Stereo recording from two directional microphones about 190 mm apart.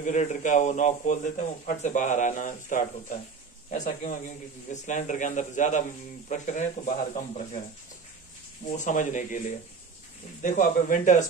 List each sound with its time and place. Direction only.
0.0 s speech: 40° left (ahead or behind)
8.7 s speech: 40° left (ahead or behind)
10.4 s speech: 45° left (ahead or behind)